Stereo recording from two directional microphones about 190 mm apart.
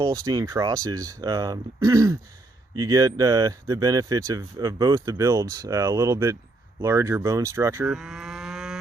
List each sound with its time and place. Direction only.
0.0 s speech: 15° right (ahead or behind)
7.9 s cattle: centre (ahead or behind)